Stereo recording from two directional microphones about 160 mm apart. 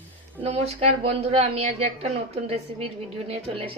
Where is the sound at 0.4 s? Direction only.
40° right (ahead or behind).